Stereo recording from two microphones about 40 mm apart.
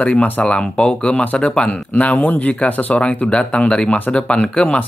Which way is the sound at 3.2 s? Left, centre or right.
Left.